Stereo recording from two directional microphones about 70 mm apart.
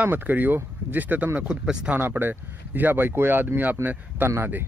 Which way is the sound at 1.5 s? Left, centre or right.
Centre.